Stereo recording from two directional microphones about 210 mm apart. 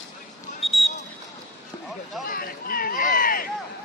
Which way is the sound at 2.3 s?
45° left (ahead or behind).